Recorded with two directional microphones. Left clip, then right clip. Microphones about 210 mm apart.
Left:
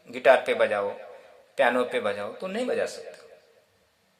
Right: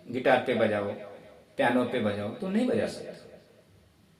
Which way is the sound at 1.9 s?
50° left (ahead or behind).